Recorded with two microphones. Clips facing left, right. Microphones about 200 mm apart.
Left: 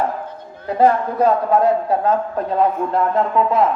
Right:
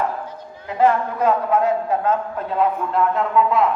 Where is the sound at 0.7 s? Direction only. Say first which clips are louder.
Left 2 dB; 40° left (ahead or behind).